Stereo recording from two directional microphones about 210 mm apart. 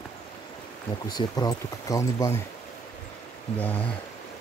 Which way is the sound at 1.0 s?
20° left (ahead or behind).